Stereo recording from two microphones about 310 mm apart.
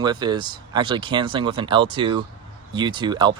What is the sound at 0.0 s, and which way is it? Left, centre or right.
Speech, centre.